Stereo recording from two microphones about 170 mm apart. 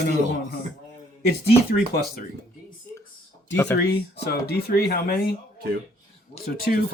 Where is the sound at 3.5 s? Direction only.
15° left (ahead or behind).